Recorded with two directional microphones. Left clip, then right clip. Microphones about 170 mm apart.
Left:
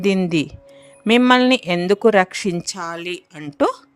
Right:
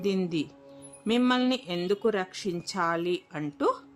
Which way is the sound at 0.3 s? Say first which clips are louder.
Left 11 dB; 50° left (ahead or behind).